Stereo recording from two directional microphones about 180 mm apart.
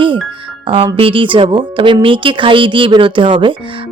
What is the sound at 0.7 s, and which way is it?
Speech, 30° right (ahead or behind).